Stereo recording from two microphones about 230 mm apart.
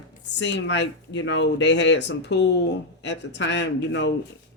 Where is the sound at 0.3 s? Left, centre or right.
Left.